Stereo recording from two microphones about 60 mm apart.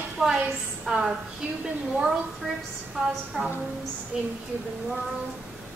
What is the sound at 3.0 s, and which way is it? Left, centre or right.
Speech, centre.